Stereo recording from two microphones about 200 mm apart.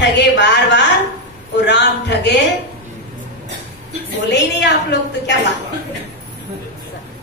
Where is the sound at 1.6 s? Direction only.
60° left (ahead or behind).